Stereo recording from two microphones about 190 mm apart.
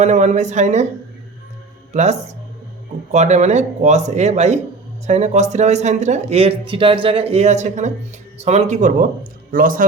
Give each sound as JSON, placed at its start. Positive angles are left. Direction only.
{"t": 0.0, "sound": "speech", "side_deg": -35}
{"t": 1.9, "sound": "speech", "side_deg": -35}